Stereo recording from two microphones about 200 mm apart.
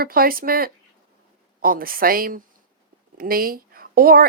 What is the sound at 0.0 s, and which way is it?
A woman's voice, 45° right (ahead or behind).